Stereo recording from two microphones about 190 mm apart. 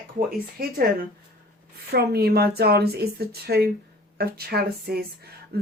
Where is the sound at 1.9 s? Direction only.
55° right (ahead or behind).